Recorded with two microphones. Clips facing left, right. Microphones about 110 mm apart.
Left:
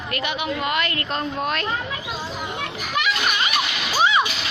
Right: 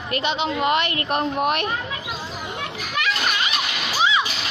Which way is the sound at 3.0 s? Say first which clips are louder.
Left 1 dB; 20° left (ahead or behind).